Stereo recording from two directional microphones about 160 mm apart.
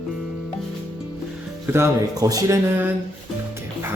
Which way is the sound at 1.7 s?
20° right (ahead or behind).